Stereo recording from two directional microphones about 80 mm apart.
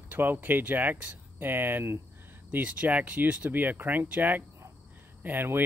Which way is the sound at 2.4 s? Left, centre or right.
Centre.